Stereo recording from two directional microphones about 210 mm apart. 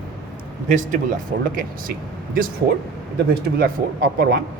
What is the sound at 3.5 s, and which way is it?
Speech, 45° right (ahead or behind).